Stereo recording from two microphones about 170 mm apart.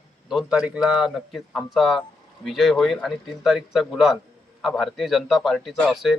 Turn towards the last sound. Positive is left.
turn(degrees=0)  # may be behind; listen again after turning